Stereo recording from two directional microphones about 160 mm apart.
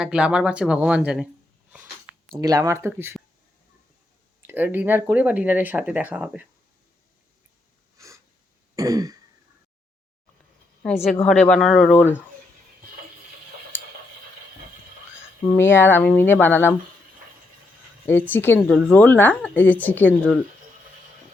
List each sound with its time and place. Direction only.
0.0 s speech: 5° right (ahead or behind)
2.3 s speech: 20° right (ahead or behind)
4.4 s speech: 10° right (ahead or behind)
7.9 s snort: 20° right (ahead or behind)
8.7 s throat clearing: 20° right (ahead or behind)
11.3 s speech: centre (ahead or behind)
15.5 s speech: 15° left (ahead or behind)
18.0 s speech: 10° left (ahead or behind)